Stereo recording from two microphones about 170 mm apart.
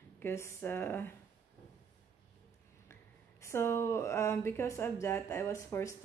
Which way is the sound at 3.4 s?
15° left (ahead or behind).